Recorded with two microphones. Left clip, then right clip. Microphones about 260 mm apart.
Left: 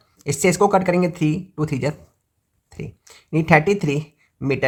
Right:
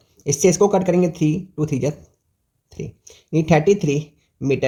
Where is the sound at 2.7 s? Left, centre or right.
Left.